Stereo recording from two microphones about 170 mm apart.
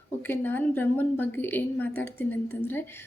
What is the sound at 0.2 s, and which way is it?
A woman's voice, 10° left (ahead or behind).